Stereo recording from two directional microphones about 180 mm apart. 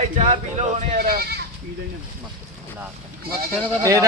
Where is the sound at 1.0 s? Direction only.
60° right (ahead or behind).